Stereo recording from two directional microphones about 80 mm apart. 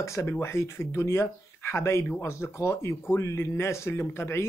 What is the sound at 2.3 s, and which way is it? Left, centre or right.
Speech, left.